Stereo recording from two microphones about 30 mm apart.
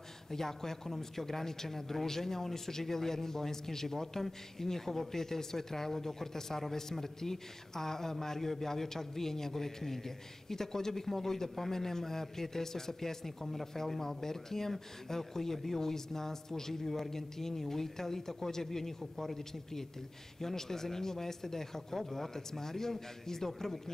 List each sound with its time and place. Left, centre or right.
0.3 s a man's voice: centre